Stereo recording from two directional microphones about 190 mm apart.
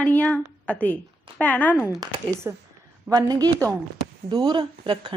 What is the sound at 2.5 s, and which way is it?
A woman's voice, 10° right (ahead or behind).